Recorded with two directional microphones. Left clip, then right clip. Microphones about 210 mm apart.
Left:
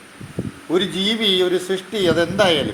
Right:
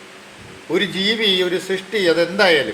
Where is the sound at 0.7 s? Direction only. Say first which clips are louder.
Right 1 dB; 30° left (ahead or behind).